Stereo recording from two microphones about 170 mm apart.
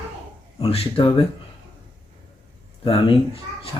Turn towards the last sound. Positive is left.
turn(degrees=30)  # may be behind; listen again after turning